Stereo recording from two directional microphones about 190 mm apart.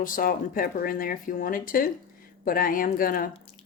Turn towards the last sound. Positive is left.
turn(degrees=50)  # may be behind; listen again after turning